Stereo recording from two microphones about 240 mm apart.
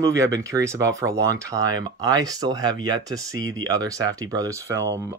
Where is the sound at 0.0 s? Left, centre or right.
Centre.